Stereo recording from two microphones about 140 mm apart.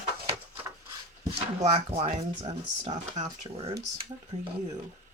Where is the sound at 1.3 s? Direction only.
45° right (ahead or behind).